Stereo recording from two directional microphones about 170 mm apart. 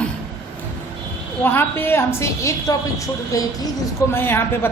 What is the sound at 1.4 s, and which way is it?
A woman's voice, 10° left (ahead or behind).